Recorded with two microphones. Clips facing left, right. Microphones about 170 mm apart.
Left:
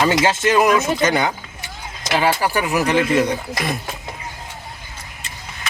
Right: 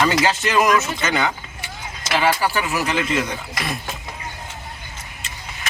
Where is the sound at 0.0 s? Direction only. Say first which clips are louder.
Left 2 dB; 20° left (ahead or behind).